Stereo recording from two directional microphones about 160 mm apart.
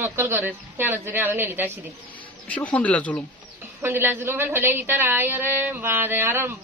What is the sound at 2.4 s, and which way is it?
Speech, 10° left (ahead or behind).